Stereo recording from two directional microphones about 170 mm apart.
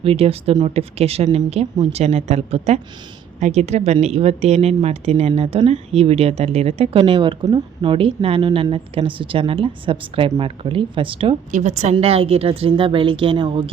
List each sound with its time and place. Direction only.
0.0 s speech: 35° right (ahead or behind)
11.5 s speech: 45° right (ahead or behind)